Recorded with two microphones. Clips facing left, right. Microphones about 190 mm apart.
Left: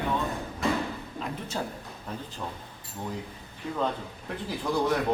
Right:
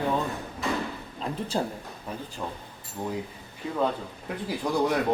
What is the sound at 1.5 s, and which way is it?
Speech, 35° right (ahead or behind).